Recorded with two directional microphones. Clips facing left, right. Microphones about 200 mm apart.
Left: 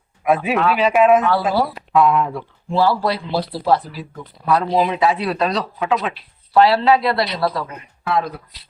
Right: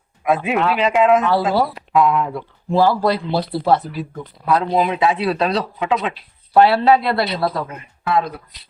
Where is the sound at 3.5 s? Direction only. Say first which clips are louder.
Right 1 dB; 25° right (ahead or behind).